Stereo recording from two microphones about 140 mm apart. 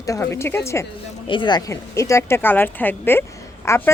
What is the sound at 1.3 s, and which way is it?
Speech, 35° left (ahead or behind).